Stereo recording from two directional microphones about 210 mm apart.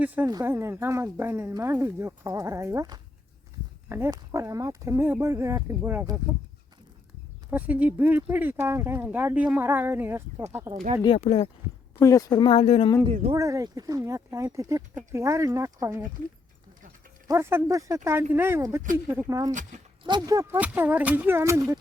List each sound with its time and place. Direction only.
0.0 s a woman's voice: 10° right (ahead or behind)
7.5 s a woman's voice: 10° right (ahead or behind)
11.0 s speech: 30° left (ahead or behind)
11.9 s speech: 15° left (ahead or behind)
13.3 s a woman's voice: 15° right (ahead or behind)
17.2 s a woman's voice: 10° right (ahead or behind)
19.5 s speech: 35° right (ahead or behind)
20.1 s a woman's voice: 20° right (ahead or behind)